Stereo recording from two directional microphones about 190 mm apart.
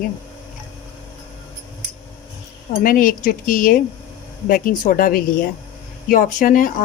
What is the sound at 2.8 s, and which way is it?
Speech, 45° left (ahead or behind).